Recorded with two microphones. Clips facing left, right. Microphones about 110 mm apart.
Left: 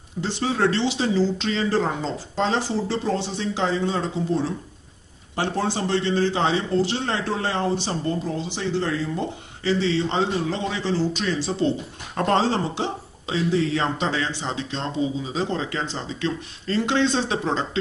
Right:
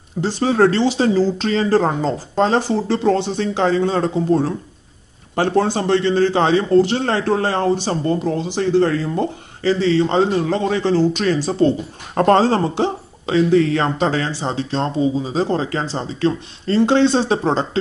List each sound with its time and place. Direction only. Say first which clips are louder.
0.2 s speech: right 7 dB; 40° right (ahead or behind)
3.0 s a man's voice: right 8 dB; 65° right (ahead or behind)
11.3 s speech: right 6 dB; 40° right (ahead or behind)